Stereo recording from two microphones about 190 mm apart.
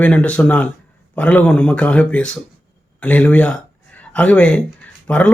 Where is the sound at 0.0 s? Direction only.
5° left (ahead or behind).